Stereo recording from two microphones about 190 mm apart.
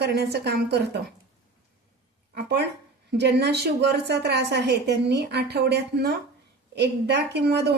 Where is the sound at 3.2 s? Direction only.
60° right (ahead or behind).